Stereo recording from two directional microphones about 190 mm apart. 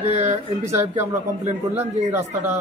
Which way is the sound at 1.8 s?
15° right (ahead or behind).